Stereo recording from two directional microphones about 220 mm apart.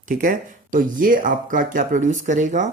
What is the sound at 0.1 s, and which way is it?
Speech, 35° right (ahead or behind).